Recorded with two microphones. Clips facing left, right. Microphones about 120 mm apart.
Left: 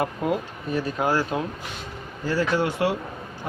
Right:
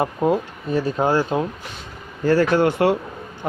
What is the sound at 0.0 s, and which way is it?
Speech, 30° right (ahead or behind).